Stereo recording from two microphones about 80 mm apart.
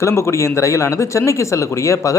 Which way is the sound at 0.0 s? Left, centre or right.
Left.